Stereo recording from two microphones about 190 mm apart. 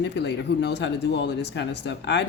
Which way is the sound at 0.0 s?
65° left (ahead or behind).